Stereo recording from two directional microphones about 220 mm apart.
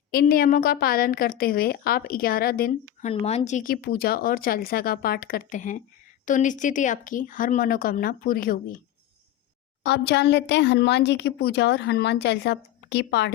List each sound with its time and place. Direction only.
0.1 s a woman's voice: 45° left (ahead or behind)
3.1 s speech: 30° left (ahead or behind)
9.8 s a woman's voice: 50° left (ahead or behind)